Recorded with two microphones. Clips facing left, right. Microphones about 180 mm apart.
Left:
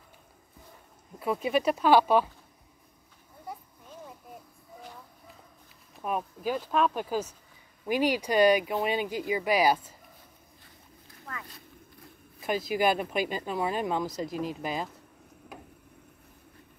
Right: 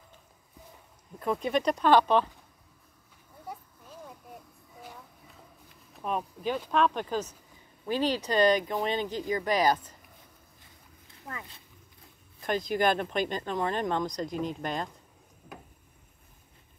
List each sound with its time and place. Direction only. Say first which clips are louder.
1.2 s speech: left 1 dB; 5° left (ahead or behind)
4.0 s a sound: even; centre (ahead or behind)
5.9 s speech: even; 5° left (ahead or behind)
11.2 s speech: right 1 dB; 25° right (ahead or behind)
12.4 s speech: even; 5° left (ahead or behind)